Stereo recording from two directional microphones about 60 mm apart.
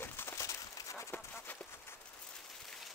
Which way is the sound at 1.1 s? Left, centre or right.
Left.